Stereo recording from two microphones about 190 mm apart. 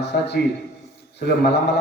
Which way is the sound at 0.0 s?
65° left (ahead or behind).